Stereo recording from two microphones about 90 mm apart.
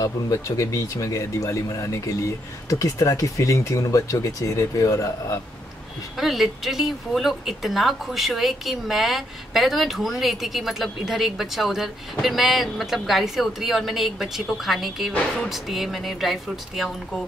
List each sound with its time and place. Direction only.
0.0 s speech: 35° left (ahead or behind)
6.1 s speech: centre (ahead or behind)